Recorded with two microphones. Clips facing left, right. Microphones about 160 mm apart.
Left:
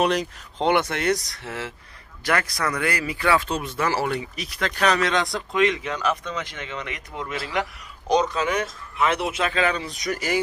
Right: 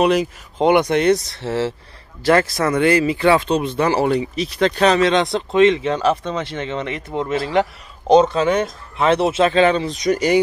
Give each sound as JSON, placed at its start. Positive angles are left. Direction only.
{"t": 0.0, "sound": "speech", "side_deg": -5}